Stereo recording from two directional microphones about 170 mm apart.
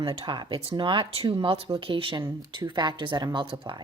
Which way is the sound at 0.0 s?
25° right (ahead or behind).